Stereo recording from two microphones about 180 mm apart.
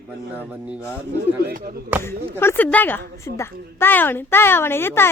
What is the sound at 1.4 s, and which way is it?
Speech, 50° right (ahead or behind).